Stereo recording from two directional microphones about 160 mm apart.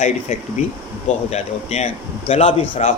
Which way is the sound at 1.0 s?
45° left (ahead or behind).